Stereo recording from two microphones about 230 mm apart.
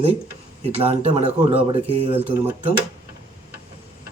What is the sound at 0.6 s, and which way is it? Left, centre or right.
Speech, right.